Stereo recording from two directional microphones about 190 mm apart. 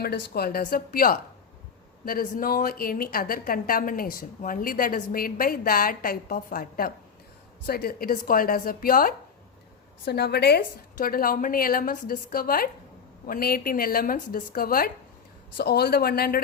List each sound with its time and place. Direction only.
0.0 s a woman's voice: 55° left (ahead or behind)